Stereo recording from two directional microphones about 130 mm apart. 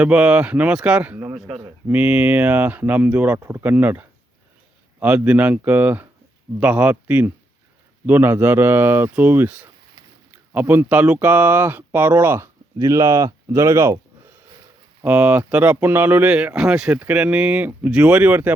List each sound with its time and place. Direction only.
0.0 s speech: 10° right (ahead or behind)